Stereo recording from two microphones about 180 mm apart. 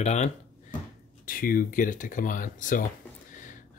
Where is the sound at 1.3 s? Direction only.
50° left (ahead or behind).